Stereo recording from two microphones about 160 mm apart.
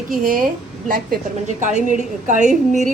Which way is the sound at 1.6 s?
50° right (ahead or behind).